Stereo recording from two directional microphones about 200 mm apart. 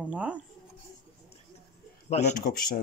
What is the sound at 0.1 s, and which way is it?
Speech, 5° right (ahead or behind).